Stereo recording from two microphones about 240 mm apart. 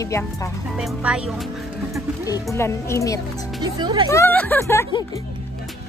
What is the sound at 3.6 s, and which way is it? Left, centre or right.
Speech, centre.